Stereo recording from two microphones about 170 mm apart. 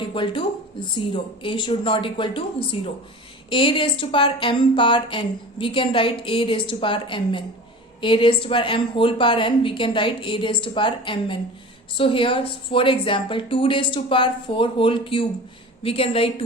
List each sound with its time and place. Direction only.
0.0 s a woman's voice: 30° left (ahead or behind)